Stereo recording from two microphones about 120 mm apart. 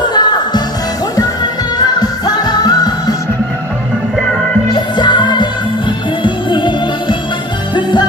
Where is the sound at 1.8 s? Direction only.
35° left (ahead or behind).